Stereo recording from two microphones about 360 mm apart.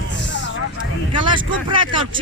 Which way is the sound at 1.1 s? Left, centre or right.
Centre.